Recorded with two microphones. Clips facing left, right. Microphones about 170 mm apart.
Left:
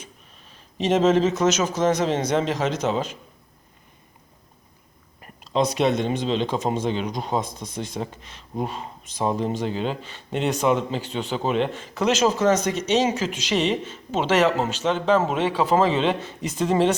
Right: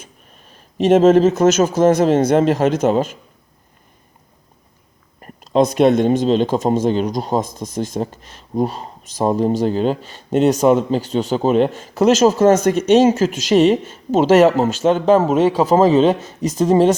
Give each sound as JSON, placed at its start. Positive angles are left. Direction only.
{"t": 0.0, "sound": "speech", "side_deg": -45}
{"t": 5.2, "sound": "speech", "side_deg": -45}